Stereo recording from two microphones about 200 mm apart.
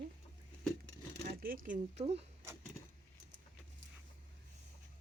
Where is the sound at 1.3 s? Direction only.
45° right (ahead or behind).